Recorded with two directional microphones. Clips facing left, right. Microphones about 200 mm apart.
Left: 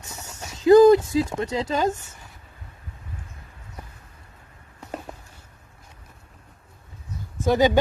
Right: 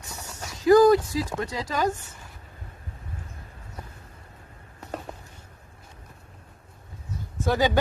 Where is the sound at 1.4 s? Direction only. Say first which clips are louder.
Left 3 dB; 25° left (ahead or behind).